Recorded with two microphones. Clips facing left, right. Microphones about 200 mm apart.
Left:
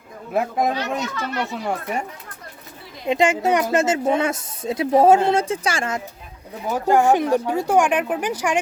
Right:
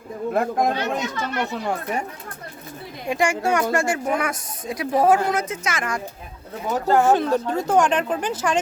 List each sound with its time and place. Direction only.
0.3 s speech: 5° left (ahead or behind)
3.1 s a woman's voice: 20° left (ahead or behind)
6.7 s speech: 10° left (ahead or behind)